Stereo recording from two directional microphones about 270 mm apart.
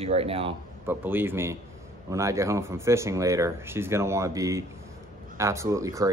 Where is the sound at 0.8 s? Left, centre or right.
Centre.